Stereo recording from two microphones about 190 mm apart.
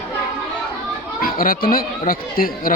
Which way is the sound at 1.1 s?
50° left (ahead or behind).